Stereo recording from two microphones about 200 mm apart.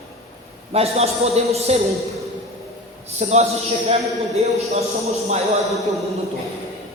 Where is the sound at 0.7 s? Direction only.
30° right (ahead or behind).